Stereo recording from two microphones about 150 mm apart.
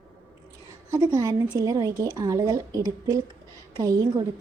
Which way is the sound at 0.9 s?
20° right (ahead or behind).